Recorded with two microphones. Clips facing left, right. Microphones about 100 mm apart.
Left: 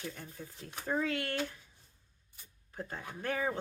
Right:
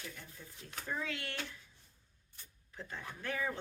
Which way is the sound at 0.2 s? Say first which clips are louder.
Left 6 dB; 40° left (ahead or behind).